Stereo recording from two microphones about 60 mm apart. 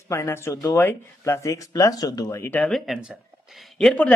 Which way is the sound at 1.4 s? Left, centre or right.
Left.